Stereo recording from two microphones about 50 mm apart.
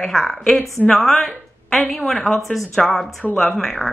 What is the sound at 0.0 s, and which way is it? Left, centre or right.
A woman's voice, centre.